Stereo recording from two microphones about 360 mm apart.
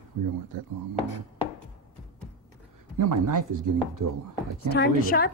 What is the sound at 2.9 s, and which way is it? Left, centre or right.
Speech, right.